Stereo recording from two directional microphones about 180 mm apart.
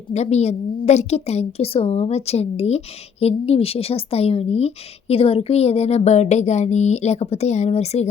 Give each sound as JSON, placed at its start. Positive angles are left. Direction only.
{"t": 0.1, "sound": "a woman's voice", "side_deg": 40}